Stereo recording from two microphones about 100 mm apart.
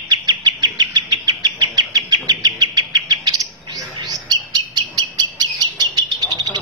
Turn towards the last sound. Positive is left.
turn(degrees=-45)  # may be behind; listen again after turning